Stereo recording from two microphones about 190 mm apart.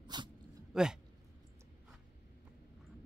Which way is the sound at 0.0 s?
25° right (ahead or behind).